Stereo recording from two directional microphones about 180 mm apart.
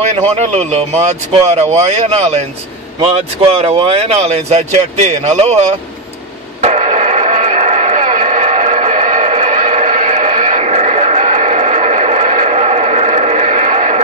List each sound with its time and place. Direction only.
0.4 s speech: 40° right (ahead or behind)
3.0 s speech: 30° right (ahead or behind)
6.6 s radio: 40° right (ahead or behind)